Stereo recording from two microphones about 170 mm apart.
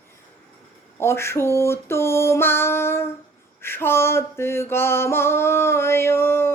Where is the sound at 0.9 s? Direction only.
15° left (ahead or behind).